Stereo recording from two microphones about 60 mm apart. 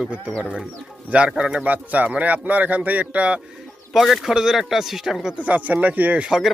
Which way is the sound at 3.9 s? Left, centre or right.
Centre.